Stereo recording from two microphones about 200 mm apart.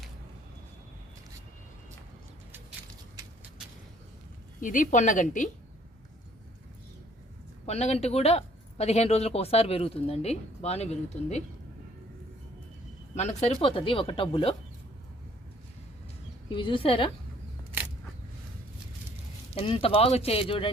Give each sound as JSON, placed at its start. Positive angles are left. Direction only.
{"t": 4.6, "sound": "speech", "side_deg": 40}
{"t": 7.7, "sound": "speech", "side_deg": 35}
{"t": 13.1, "sound": "speech", "side_deg": 35}
{"t": 16.5, "sound": "speech", "side_deg": 25}
{"t": 19.5, "sound": "speech", "side_deg": 25}